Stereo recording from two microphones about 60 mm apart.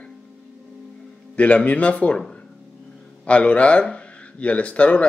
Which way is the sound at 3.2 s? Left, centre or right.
Left.